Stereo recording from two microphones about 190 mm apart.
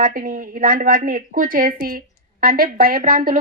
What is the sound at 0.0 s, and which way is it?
A woman's voice, 45° right (ahead or behind).